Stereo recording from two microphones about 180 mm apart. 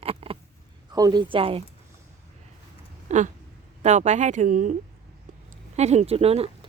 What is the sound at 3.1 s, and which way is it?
Speech, 40° right (ahead or behind).